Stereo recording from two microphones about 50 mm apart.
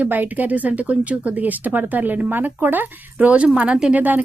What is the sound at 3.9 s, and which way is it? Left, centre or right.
Speech, right.